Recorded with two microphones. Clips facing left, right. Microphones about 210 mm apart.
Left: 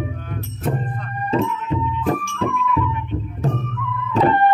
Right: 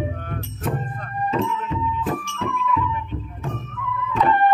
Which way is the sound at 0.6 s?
30° left (ahead or behind).